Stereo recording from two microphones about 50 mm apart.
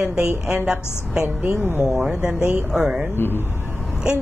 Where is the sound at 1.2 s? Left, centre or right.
Right.